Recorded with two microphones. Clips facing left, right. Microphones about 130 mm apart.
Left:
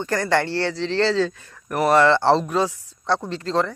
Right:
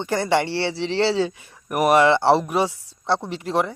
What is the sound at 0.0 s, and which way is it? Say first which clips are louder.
A man's voice: even; 15° right (ahead or behind).